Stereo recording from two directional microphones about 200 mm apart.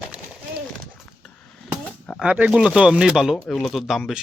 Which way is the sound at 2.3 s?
5° right (ahead or behind).